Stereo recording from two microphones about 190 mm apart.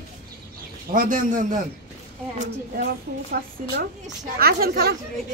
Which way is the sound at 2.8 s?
50° right (ahead or behind).